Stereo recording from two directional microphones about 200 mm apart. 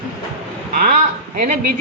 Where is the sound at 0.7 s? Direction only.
45° right (ahead or behind).